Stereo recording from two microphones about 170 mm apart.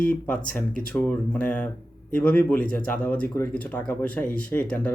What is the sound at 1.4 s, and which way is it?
Speech, 10° left (ahead or behind).